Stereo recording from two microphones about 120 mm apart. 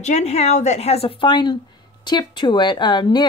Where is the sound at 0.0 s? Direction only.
65° left (ahead or behind).